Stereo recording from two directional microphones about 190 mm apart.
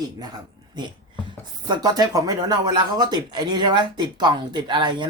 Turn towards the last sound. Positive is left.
turn(degrees=-25)  # may be behind; listen again after turning